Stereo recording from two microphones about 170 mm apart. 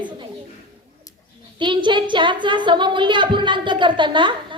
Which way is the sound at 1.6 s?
30° right (ahead or behind).